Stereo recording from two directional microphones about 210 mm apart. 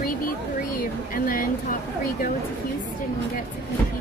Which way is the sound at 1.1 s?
40° left (ahead or behind).